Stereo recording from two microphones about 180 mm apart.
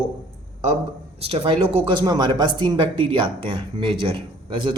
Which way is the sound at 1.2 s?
30° right (ahead or behind).